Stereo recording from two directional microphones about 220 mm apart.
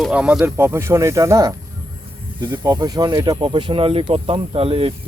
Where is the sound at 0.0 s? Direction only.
5° right (ahead or behind).